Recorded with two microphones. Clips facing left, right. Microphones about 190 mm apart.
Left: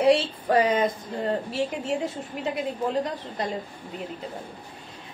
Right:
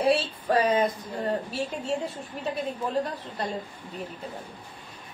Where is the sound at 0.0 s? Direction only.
25° left (ahead or behind).